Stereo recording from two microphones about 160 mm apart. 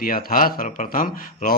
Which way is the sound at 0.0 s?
65° left (ahead or behind).